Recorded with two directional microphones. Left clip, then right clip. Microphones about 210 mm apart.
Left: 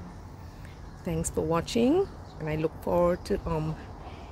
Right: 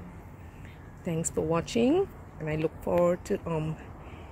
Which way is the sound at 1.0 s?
Centre (ahead or behind).